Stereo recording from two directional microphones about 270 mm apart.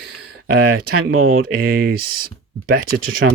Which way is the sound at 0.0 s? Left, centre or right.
Right.